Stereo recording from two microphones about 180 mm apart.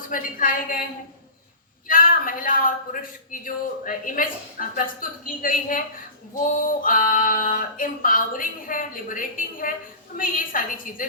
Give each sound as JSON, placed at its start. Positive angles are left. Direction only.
{"t": 0.1, "sound": "female singing", "side_deg": 50}
{"t": 1.9, "sound": "female singing", "side_deg": 50}